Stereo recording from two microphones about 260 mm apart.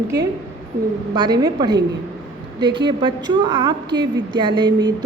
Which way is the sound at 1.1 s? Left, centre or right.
Centre.